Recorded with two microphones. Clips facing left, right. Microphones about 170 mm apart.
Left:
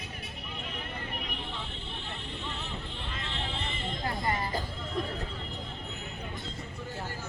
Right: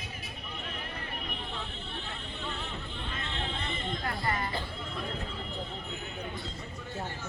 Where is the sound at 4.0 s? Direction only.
25° left (ahead or behind).